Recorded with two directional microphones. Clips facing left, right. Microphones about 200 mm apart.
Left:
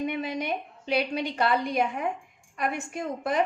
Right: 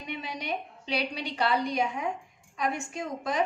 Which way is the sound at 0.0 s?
50° left (ahead or behind).